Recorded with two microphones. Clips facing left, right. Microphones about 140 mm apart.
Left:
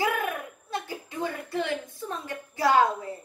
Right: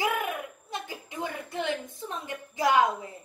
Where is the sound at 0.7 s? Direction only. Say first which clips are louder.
Left 4 dB; 20° right (ahead or behind).